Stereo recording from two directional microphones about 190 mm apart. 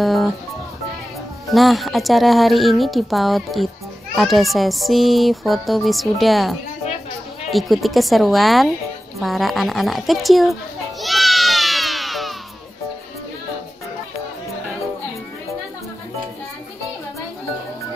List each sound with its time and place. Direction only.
0.0 s music: centre (ahead or behind)
1.5 s speech: centre (ahead or behind)
7.5 s speech: centre (ahead or behind)
9.2 s children playing: centre (ahead or behind)